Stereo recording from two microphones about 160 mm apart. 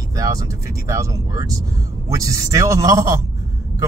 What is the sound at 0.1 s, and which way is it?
Speech, 20° right (ahead or behind).